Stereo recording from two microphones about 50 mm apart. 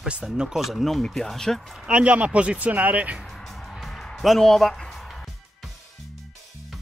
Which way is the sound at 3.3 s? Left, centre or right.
Centre.